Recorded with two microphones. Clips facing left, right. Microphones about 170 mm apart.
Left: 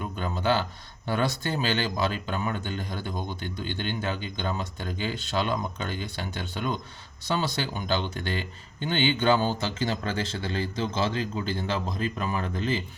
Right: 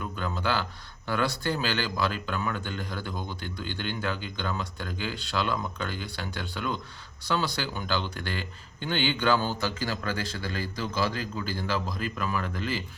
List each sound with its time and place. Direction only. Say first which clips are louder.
0.0 s speech: left 2 dB; 20° left (ahead or behind)